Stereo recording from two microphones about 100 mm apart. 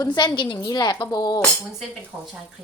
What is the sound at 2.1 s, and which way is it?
Speech, 20° right (ahead or behind).